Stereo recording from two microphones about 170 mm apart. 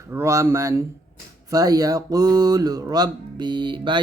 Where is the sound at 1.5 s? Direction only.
20° right (ahead or behind).